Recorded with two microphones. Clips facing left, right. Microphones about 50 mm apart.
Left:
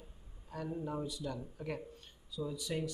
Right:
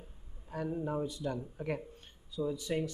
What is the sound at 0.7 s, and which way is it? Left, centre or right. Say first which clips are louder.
Speech: right 4 dB; centre.